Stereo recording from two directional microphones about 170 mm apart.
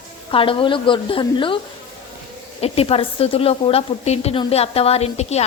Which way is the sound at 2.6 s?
35° left (ahead or behind).